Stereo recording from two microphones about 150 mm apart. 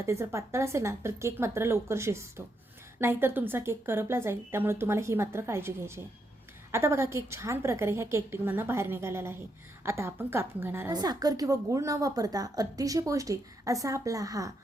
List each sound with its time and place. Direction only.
0.0 s speech: 20° right (ahead or behind)
10.9 s a woman's voice: 25° right (ahead or behind)